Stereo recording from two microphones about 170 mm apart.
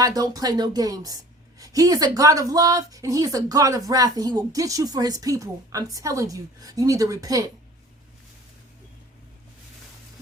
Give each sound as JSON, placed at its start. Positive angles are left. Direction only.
{"t": 0.0, "sound": "a woman's voice", "side_deg": -20}